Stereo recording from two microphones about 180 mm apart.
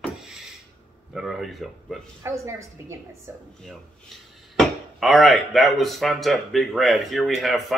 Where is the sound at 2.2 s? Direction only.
15° right (ahead or behind).